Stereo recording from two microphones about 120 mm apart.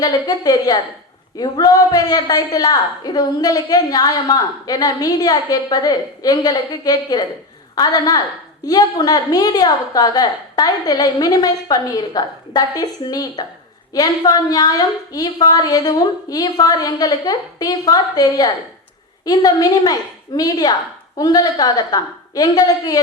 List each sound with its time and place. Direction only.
0.0 s a woman's voice: 30° left (ahead or behind)